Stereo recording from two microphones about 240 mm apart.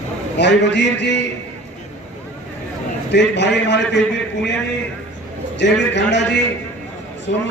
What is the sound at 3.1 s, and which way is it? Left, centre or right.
Speech, left.